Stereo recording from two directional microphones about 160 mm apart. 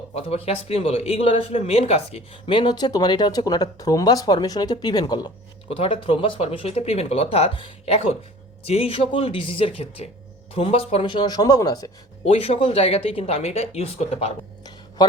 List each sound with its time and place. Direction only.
0.1 s a man's voice: 40° left (ahead or behind)
5.6 s a man's voice: 35° left (ahead or behind)
12.2 s speech: 40° left (ahead or behind)